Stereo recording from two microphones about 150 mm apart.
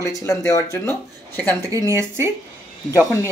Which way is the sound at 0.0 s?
20° left (ahead or behind).